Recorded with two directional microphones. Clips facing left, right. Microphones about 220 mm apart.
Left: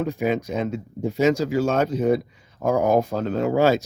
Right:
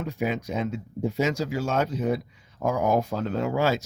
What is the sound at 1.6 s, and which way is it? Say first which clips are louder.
Speech: left 4 dB; 50° left (ahead or behind).